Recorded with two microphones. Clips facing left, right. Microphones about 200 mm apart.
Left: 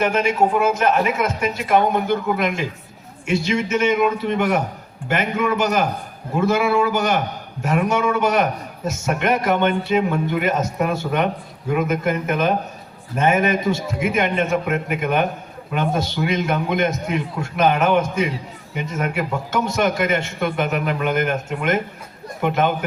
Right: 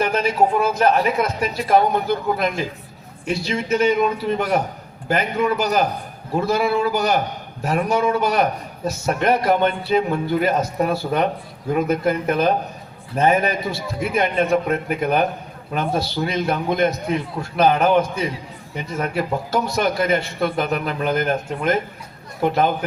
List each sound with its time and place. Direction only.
0.0 s a man's voice: 35° right (ahead or behind)